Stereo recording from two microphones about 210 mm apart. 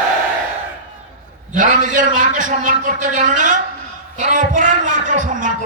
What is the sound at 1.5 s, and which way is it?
A woman's voice, 35° right (ahead or behind).